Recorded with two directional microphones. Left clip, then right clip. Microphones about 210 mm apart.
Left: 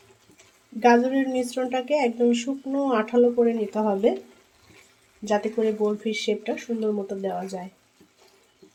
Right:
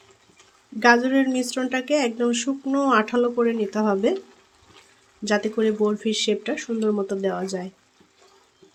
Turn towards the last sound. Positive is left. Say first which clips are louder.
# right 4 dB
turn(degrees=-25)  # may be behind; listen again after turning